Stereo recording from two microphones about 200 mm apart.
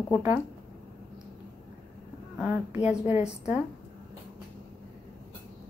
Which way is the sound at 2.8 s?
5° right (ahead or behind).